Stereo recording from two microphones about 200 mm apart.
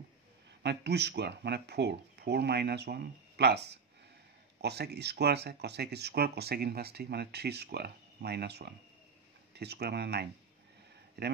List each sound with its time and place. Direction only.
0.6 s speech: 55° right (ahead or behind)